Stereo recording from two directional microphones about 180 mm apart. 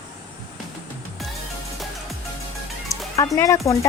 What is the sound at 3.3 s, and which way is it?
Speech, 15° left (ahead or behind).